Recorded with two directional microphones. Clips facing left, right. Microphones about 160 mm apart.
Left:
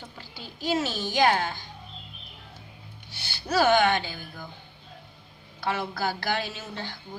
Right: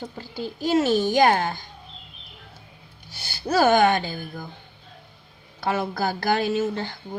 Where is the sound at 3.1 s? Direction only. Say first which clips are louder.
Right 4 dB; 45° right (ahead or behind).